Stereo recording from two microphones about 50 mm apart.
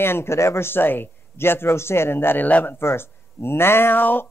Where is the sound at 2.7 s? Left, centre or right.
Left.